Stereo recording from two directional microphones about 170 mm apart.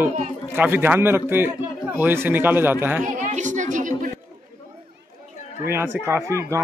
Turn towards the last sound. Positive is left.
turn(degrees=-15)  # may be behind; listen again after turning